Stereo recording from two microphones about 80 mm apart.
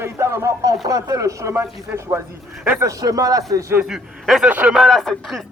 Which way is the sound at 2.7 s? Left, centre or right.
Right.